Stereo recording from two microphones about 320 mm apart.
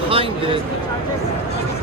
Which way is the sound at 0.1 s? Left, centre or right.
Centre.